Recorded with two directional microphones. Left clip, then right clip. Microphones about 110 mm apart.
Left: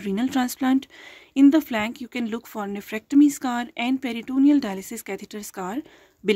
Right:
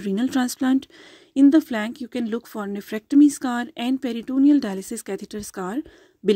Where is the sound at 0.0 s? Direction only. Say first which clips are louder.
Right 1 dB; 35° right (ahead or behind).